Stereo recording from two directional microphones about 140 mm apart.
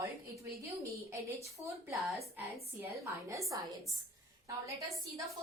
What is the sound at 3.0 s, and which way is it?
Speech, 20° right (ahead or behind).